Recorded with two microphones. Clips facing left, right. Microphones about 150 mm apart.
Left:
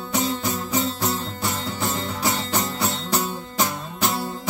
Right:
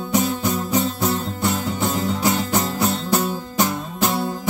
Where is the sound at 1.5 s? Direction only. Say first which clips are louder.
Right 4 dB; 15° right (ahead or behind).